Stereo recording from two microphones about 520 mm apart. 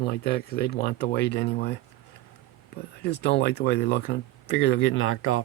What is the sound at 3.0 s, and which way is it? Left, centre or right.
Speech, centre.